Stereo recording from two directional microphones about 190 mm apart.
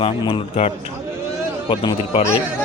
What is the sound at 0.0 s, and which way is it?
Speech, 30° left (ahead or behind).